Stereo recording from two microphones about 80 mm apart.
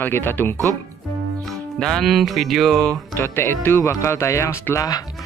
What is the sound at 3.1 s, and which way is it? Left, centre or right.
Speech, left.